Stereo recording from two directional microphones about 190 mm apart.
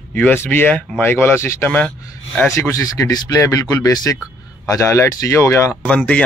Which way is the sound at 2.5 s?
15° left (ahead or behind).